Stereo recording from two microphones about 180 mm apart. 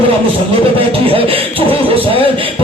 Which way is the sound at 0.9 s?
30° right (ahead or behind).